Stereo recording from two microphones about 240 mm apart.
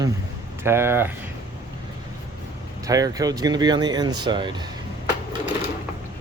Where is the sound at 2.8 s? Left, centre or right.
Centre.